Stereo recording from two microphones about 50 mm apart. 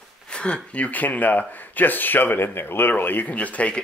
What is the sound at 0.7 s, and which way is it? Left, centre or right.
Speech, left.